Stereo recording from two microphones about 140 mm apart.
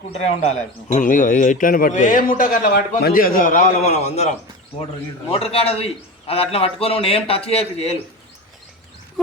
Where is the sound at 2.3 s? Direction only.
90° left; by 8.0 s 45° left (ahead or behind).